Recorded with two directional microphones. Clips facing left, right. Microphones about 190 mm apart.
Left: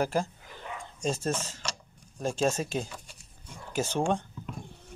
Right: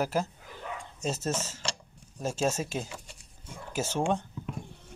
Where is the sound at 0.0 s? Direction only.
5° right (ahead or behind).